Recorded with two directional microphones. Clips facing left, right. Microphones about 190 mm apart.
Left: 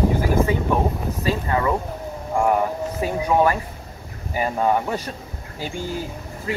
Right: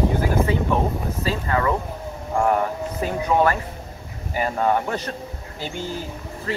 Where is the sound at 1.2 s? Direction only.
20° left (ahead or behind).